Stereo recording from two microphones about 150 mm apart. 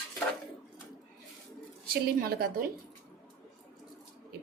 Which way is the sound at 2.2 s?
80° right.